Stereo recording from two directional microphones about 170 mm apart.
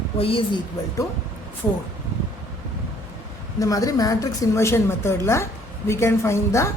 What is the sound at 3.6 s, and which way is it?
A woman's voice, 20° left (ahead or behind).